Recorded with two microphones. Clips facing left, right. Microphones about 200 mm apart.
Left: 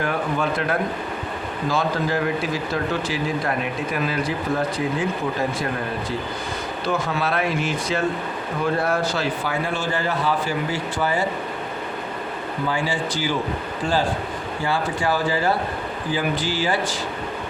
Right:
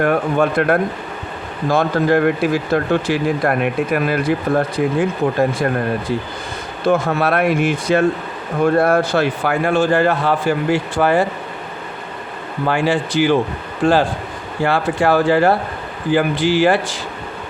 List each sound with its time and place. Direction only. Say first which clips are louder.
0.0 s speech: right 7 dB; 60° right (ahead or behind)
6.8 s speech: right 8 dB; 50° right (ahead or behind)
12.6 s speech: right 8 dB; 60° right (ahead or behind)
14.6 s speech: right 8 dB; 60° right (ahead or behind)